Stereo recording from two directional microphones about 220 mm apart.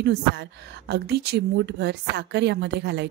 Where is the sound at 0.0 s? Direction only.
50° right (ahead or behind).